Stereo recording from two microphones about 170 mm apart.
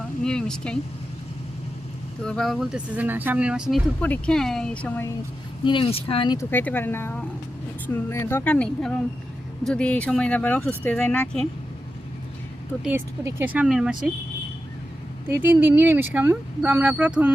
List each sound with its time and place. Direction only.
0.2 s speech: 5° left (ahead or behind)
2.2 s speech: 5° left (ahead or behind)
5.6 s speech: 30° left (ahead or behind); by 11.4 s 5° left (ahead or behind)
12.8 s speech: 10° right (ahead or behind)
15.3 s speech: 10° right (ahead or behind)